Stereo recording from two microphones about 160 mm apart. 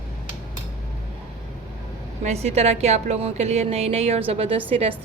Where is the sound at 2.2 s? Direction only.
40° right (ahead or behind).